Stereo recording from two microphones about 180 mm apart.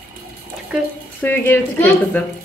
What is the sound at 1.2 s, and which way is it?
Speech, 10° left (ahead or behind).